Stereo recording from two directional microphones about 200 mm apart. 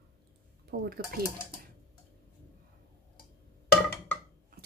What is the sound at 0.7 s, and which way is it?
Speech, 50° right (ahead or behind).